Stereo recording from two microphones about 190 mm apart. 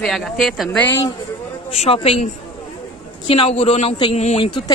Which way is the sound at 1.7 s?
30° left (ahead or behind).